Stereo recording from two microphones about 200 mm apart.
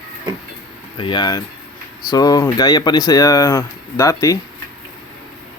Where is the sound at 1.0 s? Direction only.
25° left (ahead or behind).